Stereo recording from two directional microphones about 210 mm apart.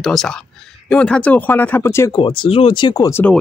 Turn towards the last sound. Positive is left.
turn(degrees=20)  # may be behind; listen again after turning